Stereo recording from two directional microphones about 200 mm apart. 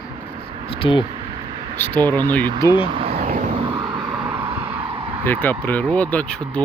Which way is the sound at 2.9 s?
30° right (ahead or behind).